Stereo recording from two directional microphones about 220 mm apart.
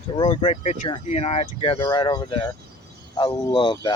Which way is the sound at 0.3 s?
25° left (ahead or behind).